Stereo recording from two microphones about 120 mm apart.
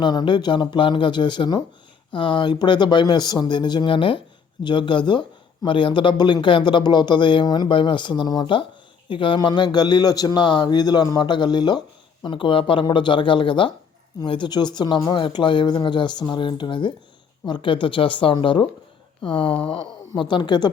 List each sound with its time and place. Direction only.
0.0 s speech: 35° left (ahead or behind)